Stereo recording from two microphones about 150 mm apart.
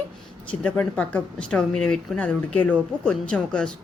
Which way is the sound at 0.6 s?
10° left (ahead or behind).